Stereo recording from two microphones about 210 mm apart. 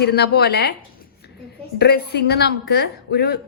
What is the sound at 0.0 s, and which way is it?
Speech, 50° left (ahead or behind).